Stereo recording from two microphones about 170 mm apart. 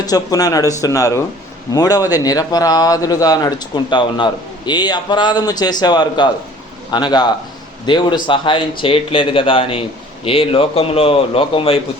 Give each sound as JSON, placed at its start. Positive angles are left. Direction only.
{"t": 0.0, "sound": "speech", "side_deg": 20}